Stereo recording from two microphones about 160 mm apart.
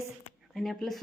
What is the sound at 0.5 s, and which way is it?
Speech, centre (ahead or behind).